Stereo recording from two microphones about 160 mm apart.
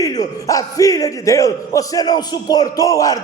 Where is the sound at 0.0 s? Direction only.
20° left (ahead or behind).